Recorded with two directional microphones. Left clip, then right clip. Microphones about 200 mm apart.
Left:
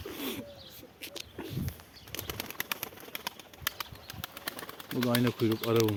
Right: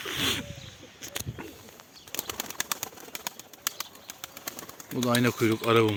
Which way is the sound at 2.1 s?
30° right (ahead or behind).